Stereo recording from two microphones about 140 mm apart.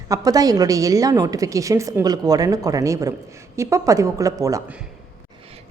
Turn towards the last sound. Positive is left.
turn(degrees=-25)  # may be behind; listen again after turning